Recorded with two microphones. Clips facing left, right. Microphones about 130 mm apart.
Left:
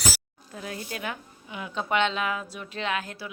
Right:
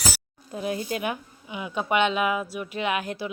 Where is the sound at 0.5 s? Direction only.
20° right (ahead or behind).